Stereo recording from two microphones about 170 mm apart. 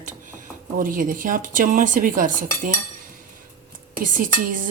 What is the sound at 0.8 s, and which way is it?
Speech, 50° right (ahead or behind).